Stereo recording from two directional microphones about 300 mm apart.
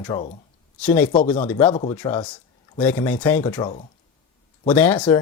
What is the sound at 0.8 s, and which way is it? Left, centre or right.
Speech, centre.